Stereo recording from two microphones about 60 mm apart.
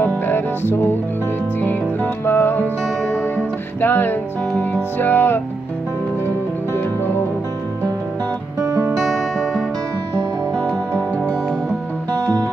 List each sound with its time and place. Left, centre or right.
0.0 s music: left
3.8 s music: left
8.5 s music: right
8.9 s music: centre
10.5 s music: left